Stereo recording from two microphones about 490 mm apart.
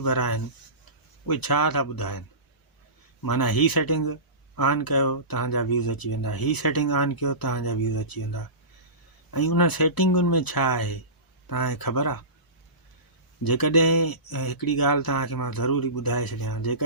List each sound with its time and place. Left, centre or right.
0.0 s speech: left
3.2 s speech: left
13.4 s speech: left